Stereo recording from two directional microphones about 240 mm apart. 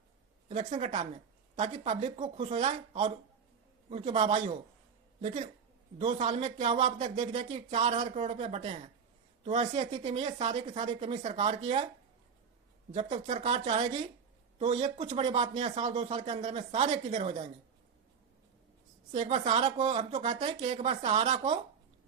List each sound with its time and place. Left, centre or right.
0.4 s a sound: right
0.7 s speech: right
12.9 s speech: right
19.1 s speech: right